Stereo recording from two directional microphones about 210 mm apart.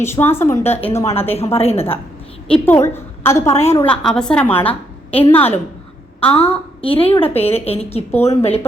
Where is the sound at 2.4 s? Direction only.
5° left (ahead or behind).